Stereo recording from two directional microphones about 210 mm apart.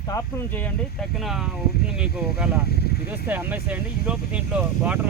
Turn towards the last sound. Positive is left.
turn(degrees=-5)  # may be behind; listen again after turning